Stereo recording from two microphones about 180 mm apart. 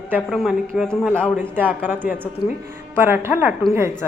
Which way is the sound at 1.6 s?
10° right (ahead or behind).